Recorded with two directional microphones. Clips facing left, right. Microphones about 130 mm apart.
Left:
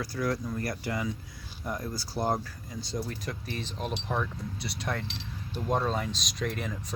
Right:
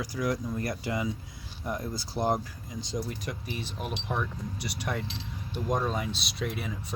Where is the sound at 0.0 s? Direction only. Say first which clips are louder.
Even; 15° right (ahead or behind).